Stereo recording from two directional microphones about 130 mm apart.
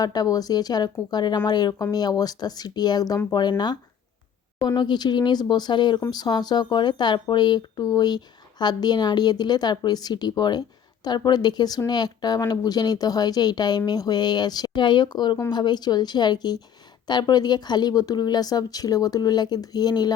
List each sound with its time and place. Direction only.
0.0 s speech: 30° left (ahead or behind)
4.6 s speech: 35° left (ahead or behind)